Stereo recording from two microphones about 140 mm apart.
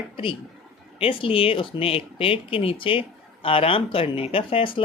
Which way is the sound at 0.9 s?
40° left (ahead or behind).